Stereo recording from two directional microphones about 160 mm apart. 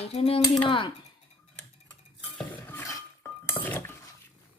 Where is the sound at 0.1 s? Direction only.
40° left (ahead or behind).